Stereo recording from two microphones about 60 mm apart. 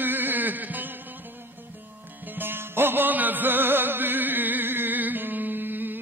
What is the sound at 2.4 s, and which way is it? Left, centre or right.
Music, right.